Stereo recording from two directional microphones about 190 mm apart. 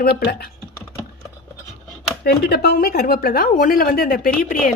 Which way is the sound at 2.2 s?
55° left (ahead or behind).